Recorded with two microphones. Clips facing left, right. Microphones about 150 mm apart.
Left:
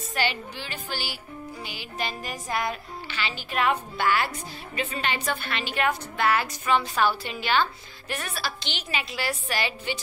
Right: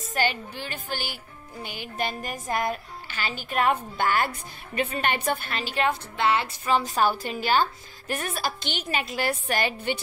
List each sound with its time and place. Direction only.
0.1 s a woman's voice: 45° right (ahead or behind)